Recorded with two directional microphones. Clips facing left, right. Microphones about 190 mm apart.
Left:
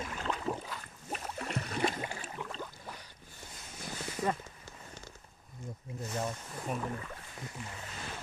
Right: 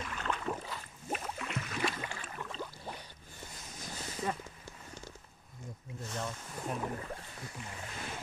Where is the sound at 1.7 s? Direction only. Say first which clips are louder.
Left 3 dB; 50° left (ahead or behind).